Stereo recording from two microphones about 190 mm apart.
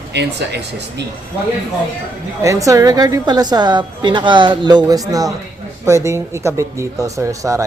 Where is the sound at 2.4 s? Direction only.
15° right (ahead or behind).